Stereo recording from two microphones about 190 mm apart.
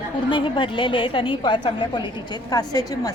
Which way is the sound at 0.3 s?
25° left (ahead or behind).